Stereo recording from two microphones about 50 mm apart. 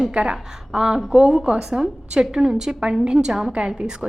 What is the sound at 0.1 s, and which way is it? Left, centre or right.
A woman's voice, centre.